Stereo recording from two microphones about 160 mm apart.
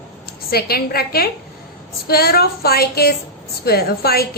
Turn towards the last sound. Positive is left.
turn(degrees=75)  # may be behind; listen again after turning